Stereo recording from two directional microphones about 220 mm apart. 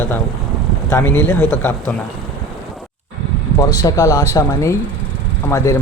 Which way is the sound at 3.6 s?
15° left (ahead or behind).